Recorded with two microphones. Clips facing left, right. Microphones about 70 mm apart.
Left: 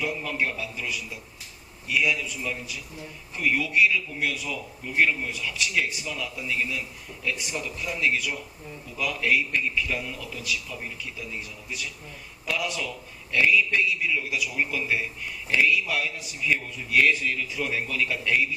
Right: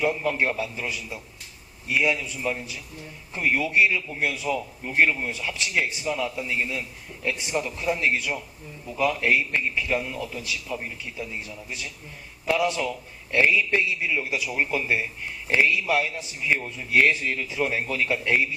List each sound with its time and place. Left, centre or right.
0.0 s a man's voice: right